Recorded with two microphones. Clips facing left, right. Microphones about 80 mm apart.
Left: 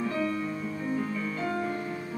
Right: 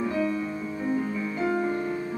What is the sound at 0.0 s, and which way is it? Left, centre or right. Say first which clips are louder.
Music: right 3 dB; centre.